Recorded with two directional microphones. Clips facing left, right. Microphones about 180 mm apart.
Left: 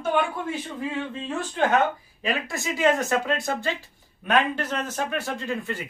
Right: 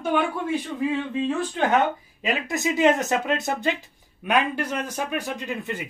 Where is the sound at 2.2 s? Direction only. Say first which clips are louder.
Right 3 dB; 20° right (ahead or behind).